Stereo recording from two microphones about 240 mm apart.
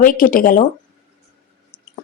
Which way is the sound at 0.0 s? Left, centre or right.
Left.